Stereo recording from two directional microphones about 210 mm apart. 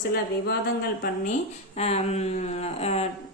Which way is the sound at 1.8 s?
30° left (ahead or behind).